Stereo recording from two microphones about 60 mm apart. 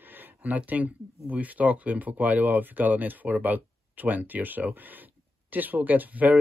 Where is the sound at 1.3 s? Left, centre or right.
Right.